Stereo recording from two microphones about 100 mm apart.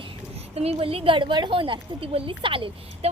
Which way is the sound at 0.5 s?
85° right.